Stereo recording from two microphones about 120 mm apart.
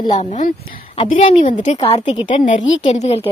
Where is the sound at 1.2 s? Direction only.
85° left.